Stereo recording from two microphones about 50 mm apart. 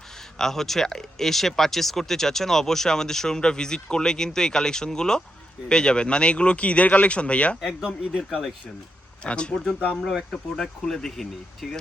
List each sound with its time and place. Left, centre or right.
0.3 s speech: centre; by 7.5 s left
8.3 s speech: centre
9.2 s speech: centre
10.0 s speech: centre
10.6 s speech: centre